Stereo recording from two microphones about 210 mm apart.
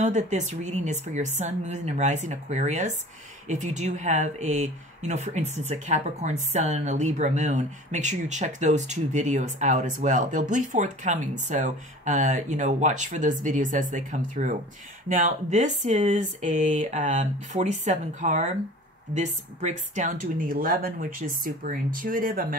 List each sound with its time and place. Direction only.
0.0 s speech: 35° right (ahead or behind)